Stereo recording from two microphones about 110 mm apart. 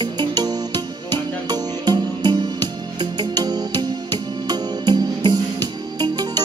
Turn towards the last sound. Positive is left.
turn(degrees=-40)  # may be behind; listen again after turning